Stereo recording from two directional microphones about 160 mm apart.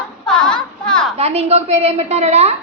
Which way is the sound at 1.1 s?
40° right (ahead or behind).